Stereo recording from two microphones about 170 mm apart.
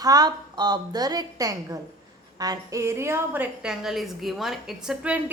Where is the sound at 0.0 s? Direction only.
20° right (ahead or behind).